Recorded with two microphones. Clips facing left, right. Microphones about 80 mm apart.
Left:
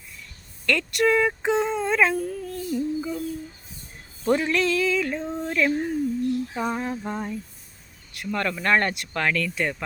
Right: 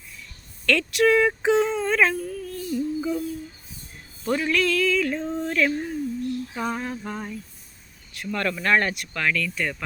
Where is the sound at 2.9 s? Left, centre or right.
Centre.